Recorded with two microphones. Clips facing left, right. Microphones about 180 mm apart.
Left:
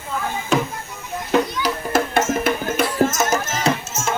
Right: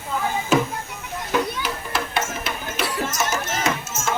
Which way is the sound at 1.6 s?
45° left (ahead or behind).